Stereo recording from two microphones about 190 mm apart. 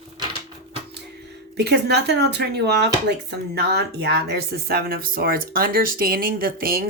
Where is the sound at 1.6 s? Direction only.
60° right (ahead or behind).